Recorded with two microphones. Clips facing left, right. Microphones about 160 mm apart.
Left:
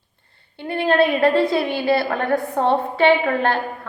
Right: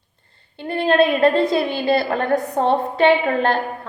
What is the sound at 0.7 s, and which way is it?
A woman's voice, 25° right (ahead or behind).